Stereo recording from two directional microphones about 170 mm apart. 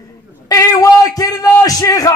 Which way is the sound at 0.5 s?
20° left (ahead or behind).